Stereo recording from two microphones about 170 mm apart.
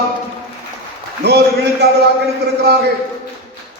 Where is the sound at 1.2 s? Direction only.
90° right.